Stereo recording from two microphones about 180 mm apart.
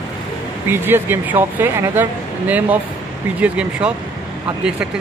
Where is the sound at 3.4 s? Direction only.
5° right (ahead or behind).